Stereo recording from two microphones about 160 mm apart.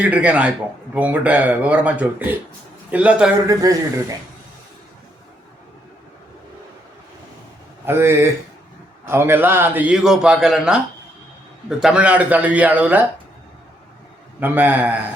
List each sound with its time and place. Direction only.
0.0 s a man's voice: 10° right (ahead or behind)
3.4 s speech: 20° right (ahead or behind)
7.9 s a man's voice: 15° right (ahead or behind)
11.8 s a man's voice: 5° right (ahead or behind)
14.3 s a man's voice: 10° right (ahead or behind)